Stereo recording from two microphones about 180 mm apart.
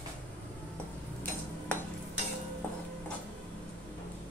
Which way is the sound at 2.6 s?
10° left (ahead or behind).